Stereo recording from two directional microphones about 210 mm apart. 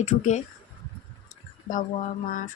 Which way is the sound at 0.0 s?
35° left (ahead or behind).